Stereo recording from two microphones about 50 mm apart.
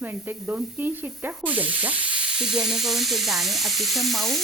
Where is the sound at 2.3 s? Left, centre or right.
Centre.